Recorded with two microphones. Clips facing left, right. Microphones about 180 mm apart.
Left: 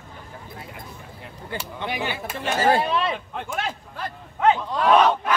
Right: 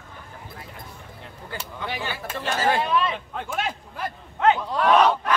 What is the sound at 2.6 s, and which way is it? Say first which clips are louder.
Speech: left 2 dB; 35° left (ahead or behind).